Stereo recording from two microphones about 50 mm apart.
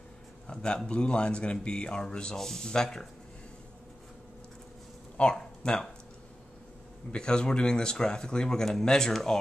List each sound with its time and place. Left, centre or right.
0.5 s speech: centre
5.3 s speech: centre
7.1 s speech: centre